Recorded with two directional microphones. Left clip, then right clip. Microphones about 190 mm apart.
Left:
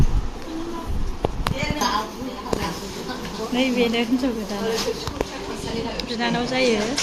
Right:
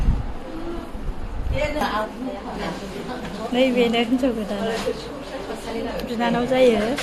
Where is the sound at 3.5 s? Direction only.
10° right (ahead or behind).